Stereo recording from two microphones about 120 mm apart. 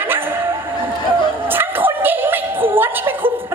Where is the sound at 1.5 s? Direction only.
15° right (ahead or behind).